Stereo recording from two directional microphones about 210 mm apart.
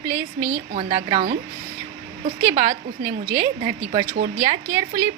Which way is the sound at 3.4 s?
40° right (ahead or behind).